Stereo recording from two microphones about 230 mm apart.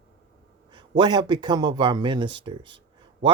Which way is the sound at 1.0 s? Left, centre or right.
Centre.